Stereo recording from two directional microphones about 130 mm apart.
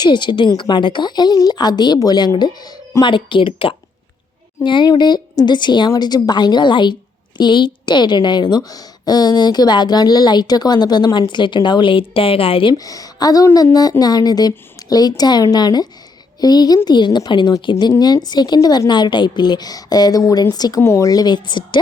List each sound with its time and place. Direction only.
0.0 s a woman's voice: 35° left (ahead or behind)
12.7 s a woman's voice: 30° left (ahead or behind)